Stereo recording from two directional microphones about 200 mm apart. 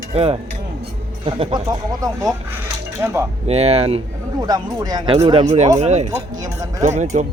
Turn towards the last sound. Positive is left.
turn(degrees=-35)  # may be behind; listen again after turning